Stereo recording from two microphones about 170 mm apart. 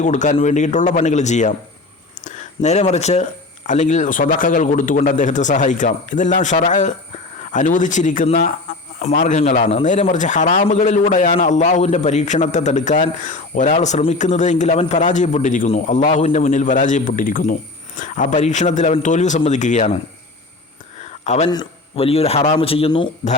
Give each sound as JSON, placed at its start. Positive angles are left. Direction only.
{"t": 0.0, "sound": "a man's voice", "side_deg": 45}
{"t": 21.2, "sound": "speech", "side_deg": 40}
{"t": 21.5, "sound": "a man's voice", "side_deg": 30}